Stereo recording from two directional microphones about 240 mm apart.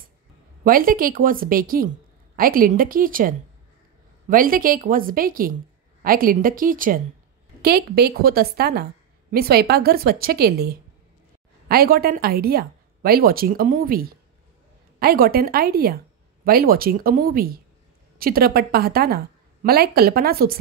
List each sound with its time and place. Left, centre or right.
0.7 s a woman's voice: right